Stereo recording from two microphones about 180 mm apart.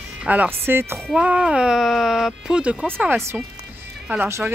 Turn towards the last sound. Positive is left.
turn(degrees=-15)  # may be behind; listen again after turning